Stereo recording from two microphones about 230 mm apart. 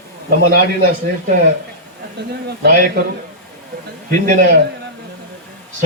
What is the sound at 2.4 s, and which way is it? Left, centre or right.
Speech, right.